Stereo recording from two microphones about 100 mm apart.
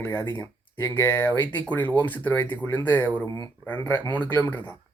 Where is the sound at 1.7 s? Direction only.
15° left (ahead or behind).